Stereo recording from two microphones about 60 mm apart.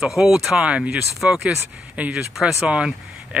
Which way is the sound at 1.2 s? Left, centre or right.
Centre.